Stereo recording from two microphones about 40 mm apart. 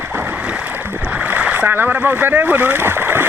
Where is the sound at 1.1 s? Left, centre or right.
Right.